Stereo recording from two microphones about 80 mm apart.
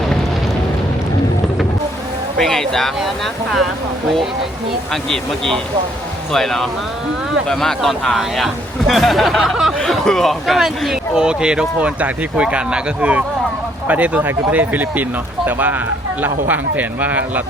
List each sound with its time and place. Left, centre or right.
2.4 s speech: centre
4.9 s speech: centre
9.7 s speech: centre; by 17.4 s right